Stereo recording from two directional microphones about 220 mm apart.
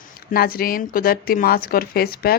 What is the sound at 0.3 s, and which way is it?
Speech, 40° left (ahead or behind).